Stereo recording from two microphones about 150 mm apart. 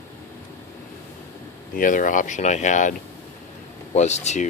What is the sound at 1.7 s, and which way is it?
Speech, 65° left (ahead or behind).